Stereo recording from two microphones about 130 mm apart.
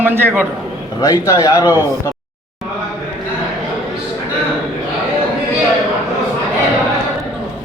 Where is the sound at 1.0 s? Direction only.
25° left (ahead or behind).